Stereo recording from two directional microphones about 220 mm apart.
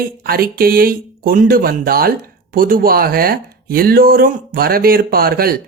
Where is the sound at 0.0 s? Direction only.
40° right (ahead or behind).